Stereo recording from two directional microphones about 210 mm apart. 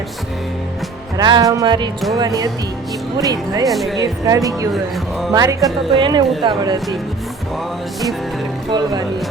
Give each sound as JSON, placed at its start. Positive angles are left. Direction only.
{"t": 1.1, "sound": "speech", "side_deg": -20}
{"t": 3.7, "sound": "speech", "side_deg": 0}
{"t": 4.0, "sound": "speech", "side_deg": -15}
{"t": 8.7, "sound": "speech", "side_deg": -20}